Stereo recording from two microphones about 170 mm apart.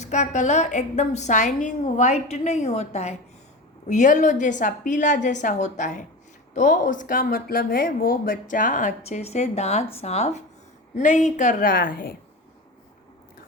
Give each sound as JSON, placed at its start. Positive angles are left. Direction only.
{"t": 0.0, "sound": "speech", "side_deg": 45}